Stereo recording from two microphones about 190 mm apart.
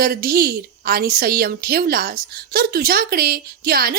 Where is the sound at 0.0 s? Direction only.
50° right (ahead or behind).